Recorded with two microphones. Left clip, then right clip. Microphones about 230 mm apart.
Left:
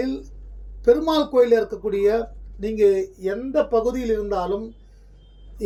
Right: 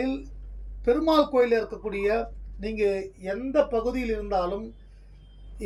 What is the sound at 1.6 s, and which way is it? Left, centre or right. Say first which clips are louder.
Speech: left 7 dB; centre.